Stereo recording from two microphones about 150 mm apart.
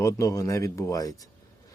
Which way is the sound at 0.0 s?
20° left (ahead or behind).